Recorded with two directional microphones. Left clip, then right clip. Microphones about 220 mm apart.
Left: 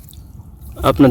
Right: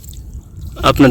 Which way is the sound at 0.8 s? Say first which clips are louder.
Right 2 dB; 5° left (ahead or behind).